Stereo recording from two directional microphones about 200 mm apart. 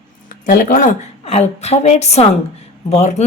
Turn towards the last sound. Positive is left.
turn(degrees=35)  # may be behind; listen again after turning